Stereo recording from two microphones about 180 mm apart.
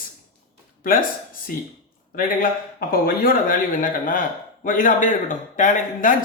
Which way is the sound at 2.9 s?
50° left (ahead or behind).